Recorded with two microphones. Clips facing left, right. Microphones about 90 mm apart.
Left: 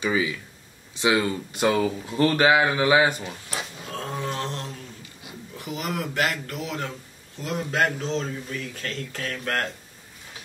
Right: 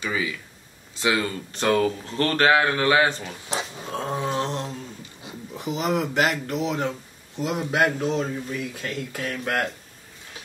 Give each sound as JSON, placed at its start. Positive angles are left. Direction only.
{"t": 0.0, "sound": "speech", "side_deg": 20}
{"t": 3.4, "sound": "a sound", "side_deg": -25}
{"t": 5.2, "sound": "speech", "side_deg": -20}